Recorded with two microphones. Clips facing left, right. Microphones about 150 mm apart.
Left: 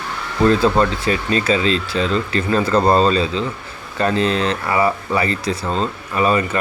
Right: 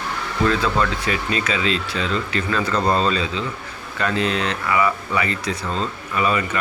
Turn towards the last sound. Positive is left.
turn(degrees=35)  # may be behind; listen again after turning